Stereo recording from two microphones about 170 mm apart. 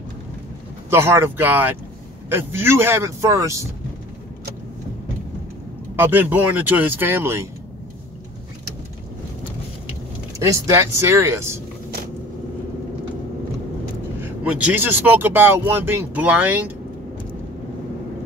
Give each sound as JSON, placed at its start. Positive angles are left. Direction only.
{"t": 0.8, "sound": "speech", "side_deg": -15}
{"t": 5.9, "sound": "speech", "side_deg": -10}
{"t": 10.4, "sound": "speech", "side_deg": -15}
{"t": 14.4, "sound": "speech", "side_deg": -10}